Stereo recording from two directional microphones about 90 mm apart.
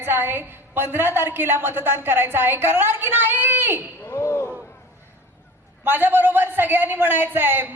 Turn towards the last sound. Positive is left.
turn(degrees=-25)  # may be behind; listen again after turning